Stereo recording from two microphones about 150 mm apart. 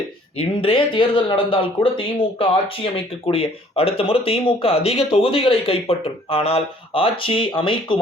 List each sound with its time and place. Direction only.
0.3 s speech: 35° left (ahead or behind)